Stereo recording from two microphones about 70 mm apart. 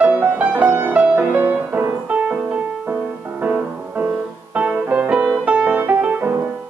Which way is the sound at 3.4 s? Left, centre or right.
Right.